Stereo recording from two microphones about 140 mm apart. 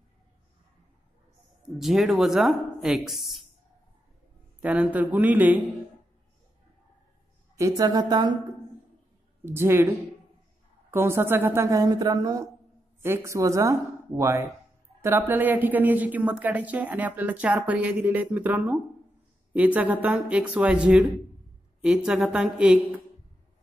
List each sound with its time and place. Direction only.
1.8 s speech: centre (ahead or behind)
4.6 s a woman's voice: 10° right (ahead or behind)
7.5 s a woman's voice: 25° right (ahead or behind)
9.4 s a woman's voice: 15° right (ahead or behind)
10.9 s a woman's voice: 15° right (ahead or behind)